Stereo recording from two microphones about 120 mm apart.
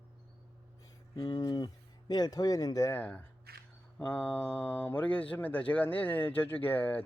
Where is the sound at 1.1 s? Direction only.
35° left (ahead or behind).